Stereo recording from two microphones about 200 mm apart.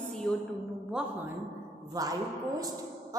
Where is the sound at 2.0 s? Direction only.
20° right (ahead or behind).